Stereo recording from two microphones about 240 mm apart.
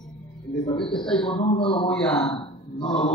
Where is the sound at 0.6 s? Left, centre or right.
Left.